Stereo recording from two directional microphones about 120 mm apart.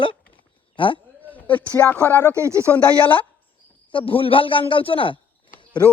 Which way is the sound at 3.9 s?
45° left (ahead or behind).